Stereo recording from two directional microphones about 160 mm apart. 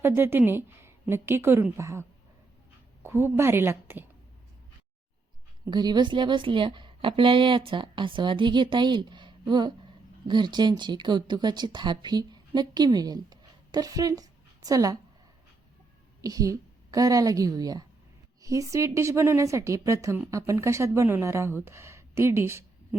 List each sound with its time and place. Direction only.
0.0 s a woman's voice: 15° right (ahead or behind)
5.6 s speech: 25° right (ahead or behind)
16.2 s a woman's voice: 20° right (ahead or behind)